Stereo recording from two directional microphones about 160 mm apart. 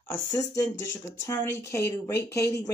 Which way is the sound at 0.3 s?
20° left (ahead or behind).